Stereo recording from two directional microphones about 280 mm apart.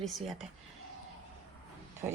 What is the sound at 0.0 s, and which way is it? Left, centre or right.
Speech, centre.